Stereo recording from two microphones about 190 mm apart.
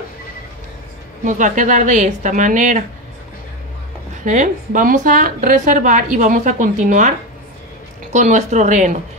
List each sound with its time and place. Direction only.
1.2 s a woman's voice: 40° right (ahead or behind)
4.2 s a woman's voice: 40° right (ahead or behind)